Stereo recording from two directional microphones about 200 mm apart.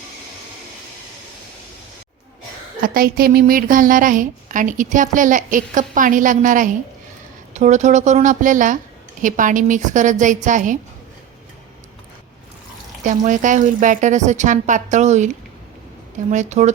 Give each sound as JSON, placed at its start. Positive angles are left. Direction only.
{"t": 2.8, "sound": "a woman's voice", "side_deg": -45}
{"t": 13.1, "sound": "a woman's voice", "side_deg": -40}